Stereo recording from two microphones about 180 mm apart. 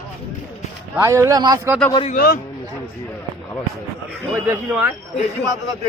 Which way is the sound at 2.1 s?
55° left (ahead or behind).